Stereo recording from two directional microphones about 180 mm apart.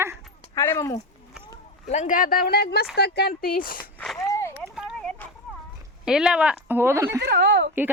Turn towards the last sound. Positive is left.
turn(degrees=-65)  # may be behind; listen again after turning